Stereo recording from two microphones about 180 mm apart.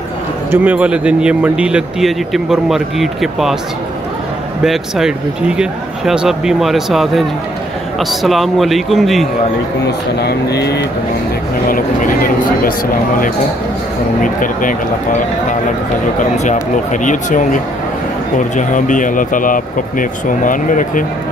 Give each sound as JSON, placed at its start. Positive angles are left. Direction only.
{"t": 0.5, "sound": "speech", "side_deg": -10}
{"t": 4.6, "sound": "speech", "side_deg": 0}
{"t": 10.2, "sound": "speech", "side_deg": 65}
{"t": 11.7, "sound": "speech", "side_deg": 50}
{"t": 14.2, "sound": "speech", "side_deg": 50}
{"t": 16.9, "sound": "speech", "side_deg": 45}
{"t": 18.6, "sound": "speech", "side_deg": 45}